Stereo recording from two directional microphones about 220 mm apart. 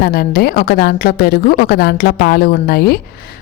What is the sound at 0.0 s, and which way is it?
A woman's voice, 45° left (ahead or behind).